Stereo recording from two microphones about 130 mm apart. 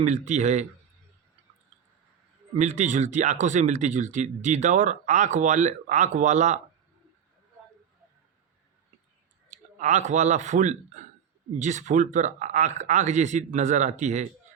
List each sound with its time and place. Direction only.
0.0 s speech: 65° right (ahead or behind)
2.6 s speech: 65° right (ahead or behind)
9.7 s speech: 65° right (ahead or behind)